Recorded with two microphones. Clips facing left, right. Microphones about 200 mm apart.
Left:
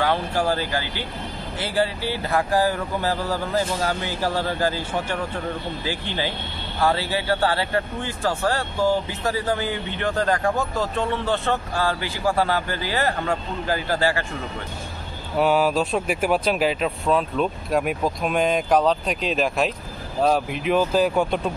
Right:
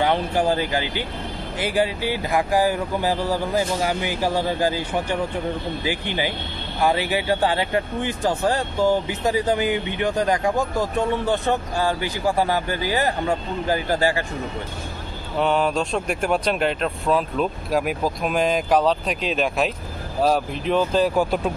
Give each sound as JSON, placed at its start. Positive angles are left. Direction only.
{"t": 0.0, "sound": "speech", "side_deg": -20}
{"t": 15.3, "sound": "speech", "side_deg": 5}